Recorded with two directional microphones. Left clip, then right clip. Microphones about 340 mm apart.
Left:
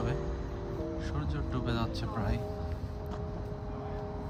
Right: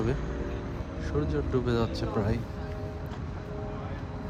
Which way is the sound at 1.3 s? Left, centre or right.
Centre.